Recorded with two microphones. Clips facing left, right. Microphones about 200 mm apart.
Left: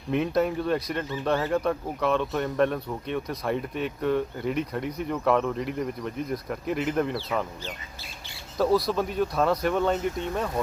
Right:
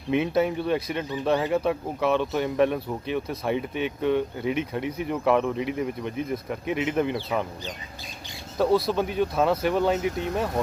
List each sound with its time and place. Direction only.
0.1 s speech: centre (ahead or behind)
8.5 s speech: centre (ahead or behind)